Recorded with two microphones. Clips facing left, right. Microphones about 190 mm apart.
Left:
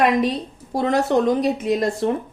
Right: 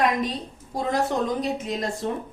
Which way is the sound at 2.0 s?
65° left (ahead or behind).